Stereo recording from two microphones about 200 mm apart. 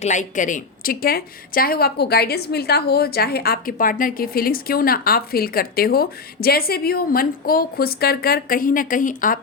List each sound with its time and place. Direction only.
0.0 s a woman's voice: 35° left (ahead or behind)